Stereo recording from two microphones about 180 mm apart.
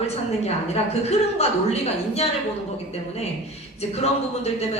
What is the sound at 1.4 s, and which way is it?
Speech, 35° left (ahead or behind).